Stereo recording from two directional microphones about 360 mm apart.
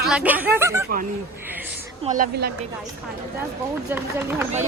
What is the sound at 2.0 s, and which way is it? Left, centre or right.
Speech, right.